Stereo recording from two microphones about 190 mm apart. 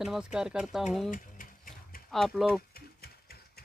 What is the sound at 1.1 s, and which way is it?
Mechanisms, 45° left (ahead or behind).